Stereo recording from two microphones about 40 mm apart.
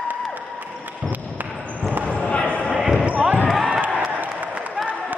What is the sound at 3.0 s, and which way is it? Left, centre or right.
Basketball bounce, right.